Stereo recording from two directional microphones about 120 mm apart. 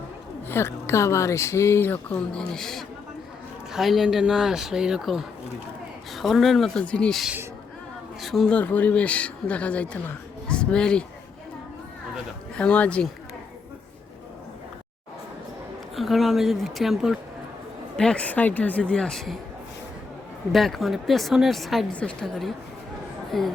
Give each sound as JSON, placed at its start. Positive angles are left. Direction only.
{"t": 0.4, "sound": "speech", "side_deg": 20}
{"t": 12.5, "sound": "speech", "side_deg": 10}
{"t": 16.0, "sound": "speech", "side_deg": 0}
{"t": 20.5, "sound": "speech", "side_deg": 0}